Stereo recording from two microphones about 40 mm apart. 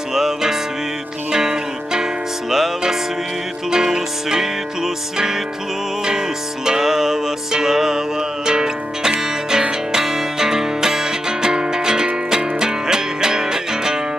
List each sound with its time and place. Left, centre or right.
0.1 s music: centre
6.7 s music: centre